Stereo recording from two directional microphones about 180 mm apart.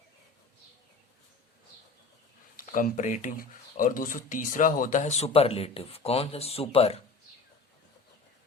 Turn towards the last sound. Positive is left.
turn(degrees=35)  # may be behind; listen again after turning